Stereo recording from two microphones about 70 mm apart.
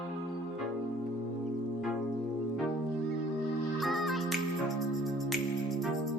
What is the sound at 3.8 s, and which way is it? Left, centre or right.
Music, centre.